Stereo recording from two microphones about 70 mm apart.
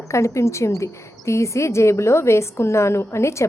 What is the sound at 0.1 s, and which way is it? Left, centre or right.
A woman's voice, left.